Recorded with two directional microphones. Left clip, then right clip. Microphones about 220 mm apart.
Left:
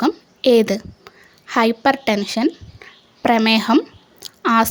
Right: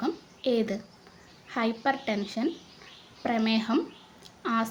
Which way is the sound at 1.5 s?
50° left (ahead or behind).